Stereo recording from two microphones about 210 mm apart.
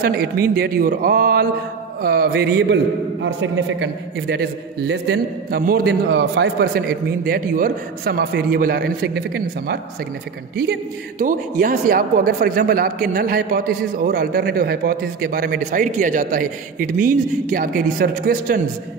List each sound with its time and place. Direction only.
0.0 s a man's voice: 45° right (ahead or behind)
10.7 s a man's voice: 40° right (ahead or behind)